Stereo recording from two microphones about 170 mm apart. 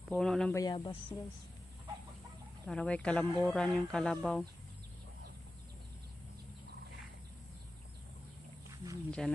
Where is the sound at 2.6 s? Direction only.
5° left (ahead or behind).